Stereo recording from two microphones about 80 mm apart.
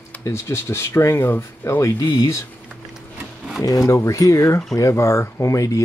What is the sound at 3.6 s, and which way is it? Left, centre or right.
Speech, left.